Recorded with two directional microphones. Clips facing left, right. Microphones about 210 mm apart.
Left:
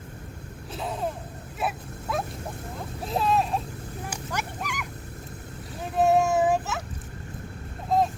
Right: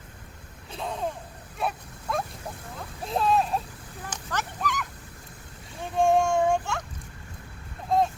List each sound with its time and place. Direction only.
0.7 s vehicle: 5° left (ahead or behind)
1.5 s dog: 5° left (ahead or behind)
3.0 s vehicle: centre (ahead or behind)
4.1 s dog: 10° left (ahead or behind)
5.8 s child singing: 5° left (ahead or behind)
7.9 s a sound: centre (ahead or behind)